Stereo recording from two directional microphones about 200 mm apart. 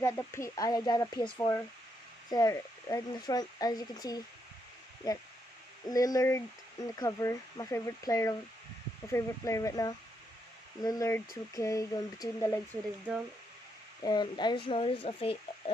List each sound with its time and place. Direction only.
0.0 s speech: 15° left (ahead or behind)
5.9 s speech: 20° left (ahead or behind)
14.0 s speech: 20° left (ahead or behind)